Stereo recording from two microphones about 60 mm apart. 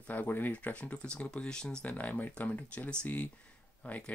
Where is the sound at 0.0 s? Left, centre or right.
Left.